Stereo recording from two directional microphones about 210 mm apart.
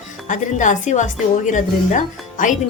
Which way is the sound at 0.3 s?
35° left (ahead or behind).